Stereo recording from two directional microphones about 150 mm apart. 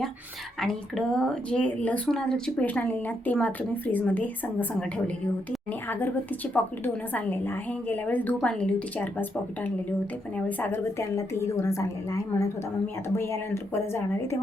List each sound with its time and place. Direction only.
0.6 s a woman's voice: 5° left (ahead or behind)